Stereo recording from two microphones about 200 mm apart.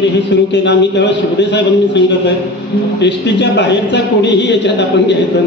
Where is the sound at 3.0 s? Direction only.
60° left (ahead or behind).